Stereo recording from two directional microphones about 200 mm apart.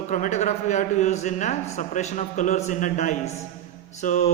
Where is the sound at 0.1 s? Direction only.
35° left (ahead or behind).